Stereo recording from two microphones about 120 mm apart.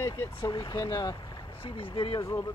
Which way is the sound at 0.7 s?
40° left (ahead or behind).